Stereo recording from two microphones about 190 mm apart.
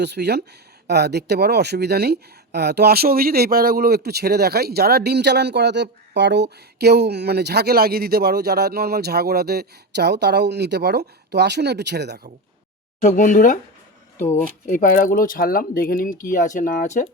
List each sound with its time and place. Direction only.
0.0 s speech: 60° right (ahead or behind)
13.0 s speech: 40° left (ahead or behind)